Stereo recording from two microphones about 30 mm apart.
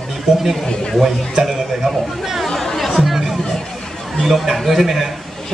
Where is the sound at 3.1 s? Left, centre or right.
Centre.